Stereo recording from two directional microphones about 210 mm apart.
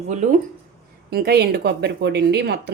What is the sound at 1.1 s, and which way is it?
A woman's voice, 50° right (ahead or behind).